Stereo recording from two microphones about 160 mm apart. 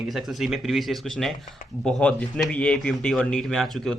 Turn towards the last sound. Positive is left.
turn(degrees=0)  # may be behind; listen again after turning